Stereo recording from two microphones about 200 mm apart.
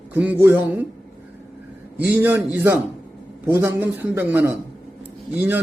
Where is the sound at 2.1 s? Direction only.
10° right (ahead or behind).